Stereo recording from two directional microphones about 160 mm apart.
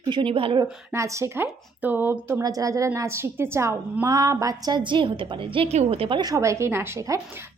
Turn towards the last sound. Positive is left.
turn(degrees=-15)  # may be behind; listen again after turning